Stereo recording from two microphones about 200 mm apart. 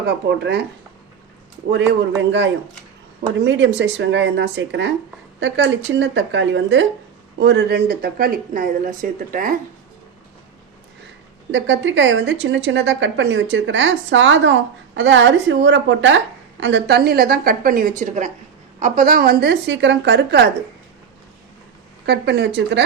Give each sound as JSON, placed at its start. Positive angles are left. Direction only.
{"t": 0.0, "sound": "a woman's voice", "side_deg": -55}
{"t": 3.4, "sound": "a woman's voice", "side_deg": -60}
{"t": 7.3, "sound": "a woman's voice", "side_deg": -55}
{"t": 11.5, "sound": "a woman's voice", "side_deg": -65}
{"t": 22.0, "sound": "a woman's voice", "side_deg": -60}